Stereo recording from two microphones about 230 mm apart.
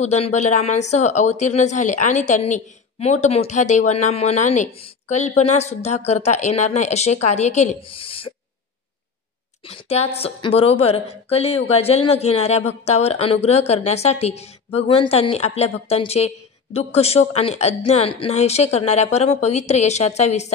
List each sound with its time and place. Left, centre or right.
0.0 s speech: left
9.7 s a woman's voice: left